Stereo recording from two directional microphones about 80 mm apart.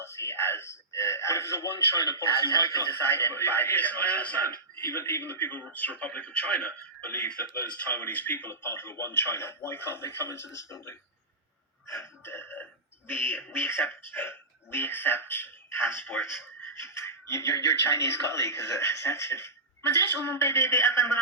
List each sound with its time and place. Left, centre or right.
0.0 s speech: left
2.9 s speech: left
11.9 s music: left
13.1 s speech: left